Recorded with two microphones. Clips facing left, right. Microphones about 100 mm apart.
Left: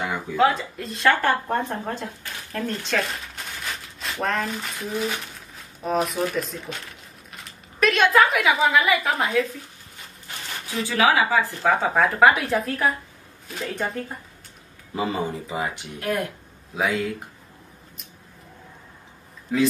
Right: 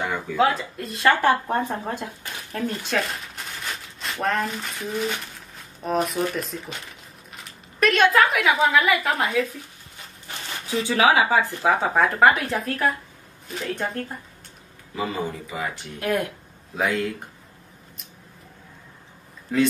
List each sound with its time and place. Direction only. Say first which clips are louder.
0.4 s a woman's voice: left 1 dB; centre (ahead or behind)
10.8 s speech: right 1 dB; 20° right (ahead or behind)
11.6 s a woman's voice: even; 5° right (ahead or behind)
15.0 s speech: left 2 dB; 25° left (ahead or behind)
16.7 s a woman's voice: even; centre (ahead or behind)
19.5 s a woman's voice: even; 5° left (ahead or behind)